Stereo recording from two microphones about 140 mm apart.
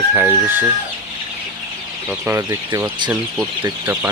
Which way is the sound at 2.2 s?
20° right (ahead or behind).